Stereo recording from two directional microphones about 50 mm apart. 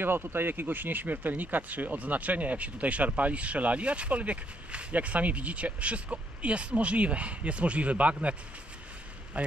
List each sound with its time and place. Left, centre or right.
0.0 s speech: right